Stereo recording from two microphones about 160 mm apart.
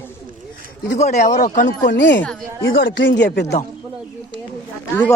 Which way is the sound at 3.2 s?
90° left.